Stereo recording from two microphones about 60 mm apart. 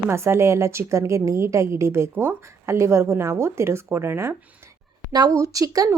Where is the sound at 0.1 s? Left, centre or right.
Right.